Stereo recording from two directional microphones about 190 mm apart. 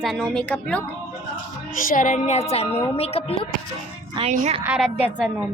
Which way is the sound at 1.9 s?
45° left (ahead or behind).